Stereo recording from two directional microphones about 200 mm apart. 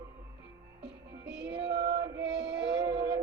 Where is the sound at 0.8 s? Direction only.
5° right (ahead or behind).